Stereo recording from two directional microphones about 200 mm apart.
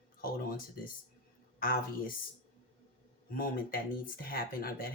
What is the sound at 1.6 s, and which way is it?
Speech, 45° left (ahead or behind).